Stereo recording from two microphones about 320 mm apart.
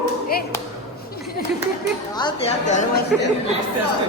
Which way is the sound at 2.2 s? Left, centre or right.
Centre.